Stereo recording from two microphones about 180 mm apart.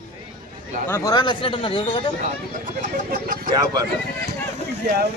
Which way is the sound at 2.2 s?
45° right (ahead or behind).